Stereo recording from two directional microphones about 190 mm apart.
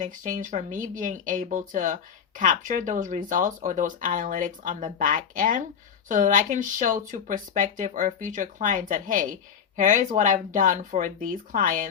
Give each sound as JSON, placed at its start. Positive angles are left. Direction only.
{"t": 0.0, "sound": "speech", "side_deg": -40}